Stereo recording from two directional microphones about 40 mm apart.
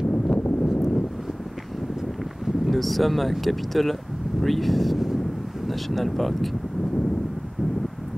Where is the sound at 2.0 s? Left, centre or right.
Centre.